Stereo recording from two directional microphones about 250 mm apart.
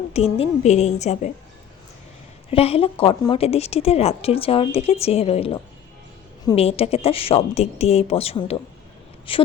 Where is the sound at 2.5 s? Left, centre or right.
Left.